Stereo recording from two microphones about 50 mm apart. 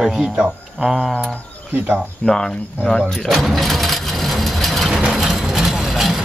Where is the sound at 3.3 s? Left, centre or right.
Centre.